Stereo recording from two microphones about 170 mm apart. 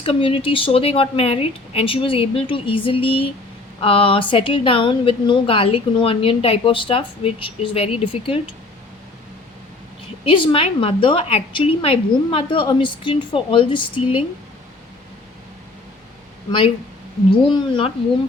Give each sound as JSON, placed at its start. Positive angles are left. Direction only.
{"t": 0.0, "sound": "a woman's voice", "side_deg": 35}
{"t": 10.2, "sound": "a woman's voice", "side_deg": 30}
{"t": 16.5, "sound": "a woman's voice", "side_deg": 30}